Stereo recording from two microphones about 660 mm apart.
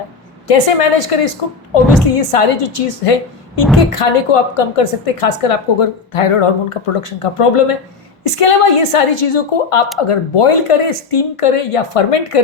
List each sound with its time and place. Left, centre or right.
0.4 s a woman's voice: left